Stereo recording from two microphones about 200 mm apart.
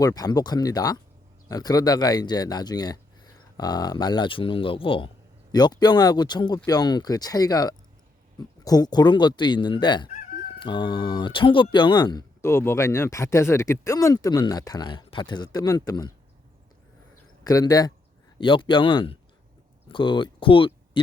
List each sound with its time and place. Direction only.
0.0 s speech: 20° left (ahead or behind)
17.4 s speech: 20° left (ahead or behind)